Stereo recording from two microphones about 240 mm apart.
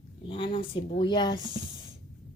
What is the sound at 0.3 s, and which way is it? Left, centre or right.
Speech, left.